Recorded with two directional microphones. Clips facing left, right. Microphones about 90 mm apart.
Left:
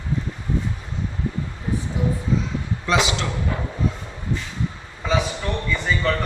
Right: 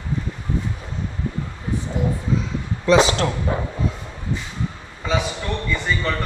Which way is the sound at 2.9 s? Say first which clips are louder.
Right 5 dB; 40° right (ahead or behind).